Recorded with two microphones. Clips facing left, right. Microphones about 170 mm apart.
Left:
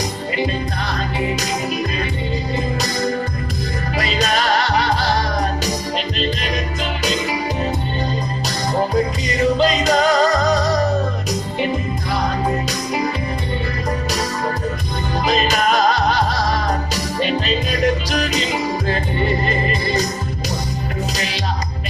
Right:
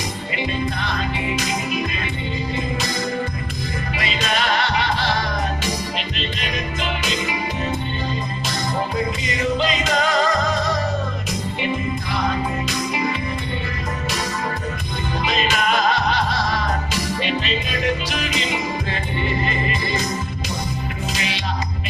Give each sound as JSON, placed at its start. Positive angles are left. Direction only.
{"t": 0.3, "sound": "music", "side_deg": 40}
{"t": 3.9, "sound": "music", "side_deg": 40}
{"t": 9.2, "sound": "music", "side_deg": 40}
{"t": 12.1, "sound": "music", "side_deg": 40}
{"t": 15.2, "sound": "music", "side_deg": 40}